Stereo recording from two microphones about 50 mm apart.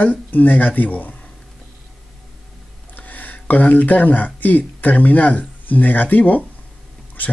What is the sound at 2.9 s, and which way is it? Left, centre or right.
Speech, left.